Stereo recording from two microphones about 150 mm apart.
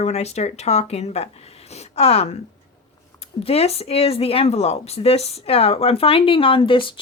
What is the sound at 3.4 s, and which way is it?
A woman's voice, 45° left (ahead or behind).